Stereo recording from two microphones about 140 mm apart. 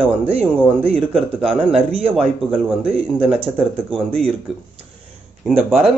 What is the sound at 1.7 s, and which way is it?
Speech, 45° right (ahead or behind).